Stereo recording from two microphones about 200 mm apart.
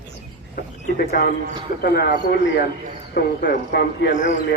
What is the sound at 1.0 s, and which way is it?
A man's voice, 50° left (ahead or behind).